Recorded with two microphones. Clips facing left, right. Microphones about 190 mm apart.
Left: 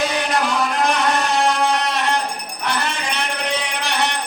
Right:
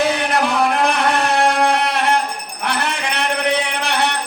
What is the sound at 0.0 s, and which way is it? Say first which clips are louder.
Music: right 3 dB; 60° right (ahead or behind).